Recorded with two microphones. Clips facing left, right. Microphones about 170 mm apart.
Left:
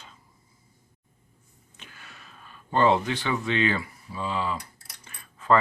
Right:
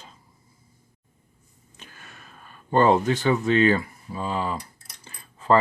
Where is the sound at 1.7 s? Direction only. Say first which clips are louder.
Right 2 dB; 45° right (ahead or behind).